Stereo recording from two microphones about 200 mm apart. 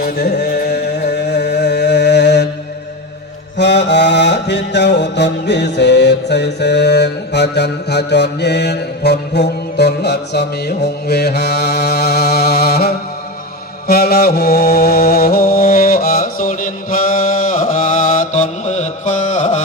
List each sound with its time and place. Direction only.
0.0 s music: 50° left (ahead or behind)
3.6 s mantra: 60° left (ahead or behind)
13.8 s music: 50° left (ahead or behind); by 19.6 s 35° left (ahead or behind)